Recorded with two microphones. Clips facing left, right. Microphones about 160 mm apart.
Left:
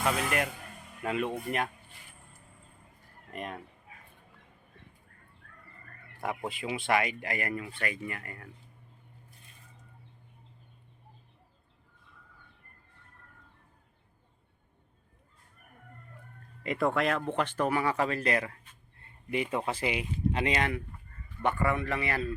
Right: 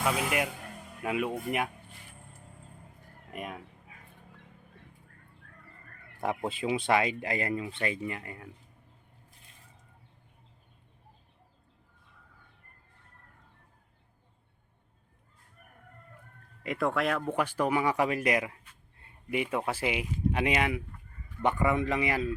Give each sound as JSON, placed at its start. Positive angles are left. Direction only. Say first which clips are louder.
{"t": 0.0, "sound": "speech", "louder": "even", "side_deg": -5}
{"t": 3.3, "sound": "speech", "louder": "even", "side_deg": -5}
{"t": 6.1, "sound": "speech", "louder": "right 3 dB", "side_deg": -20}
{"t": 16.6, "sound": "speech", "louder": "left 1 dB", "side_deg": 0}